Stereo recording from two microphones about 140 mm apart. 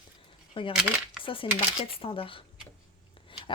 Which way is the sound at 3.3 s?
35° left (ahead or behind).